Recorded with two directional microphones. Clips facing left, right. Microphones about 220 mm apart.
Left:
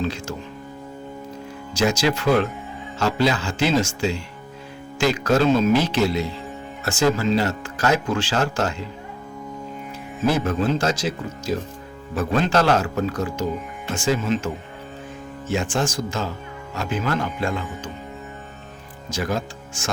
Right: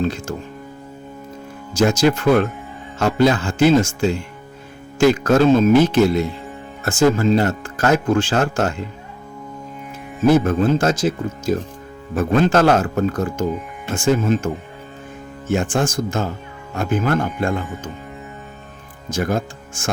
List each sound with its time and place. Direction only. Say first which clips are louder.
0.0 s speech: right 4 dB; 50° right (ahead or behind)
1.7 s speech: right 5 dB; 50° right (ahead or behind)
10.2 s speech: right 6 dB; 50° right (ahead or behind)
19.1 s speech: right 4 dB; 50° right (ahead or behind)